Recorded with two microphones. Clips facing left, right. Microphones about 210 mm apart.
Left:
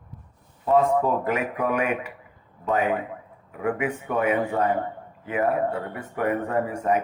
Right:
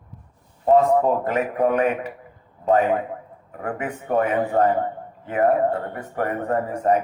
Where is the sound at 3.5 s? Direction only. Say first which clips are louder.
Left 3 dB; 45° right (ahead or behind).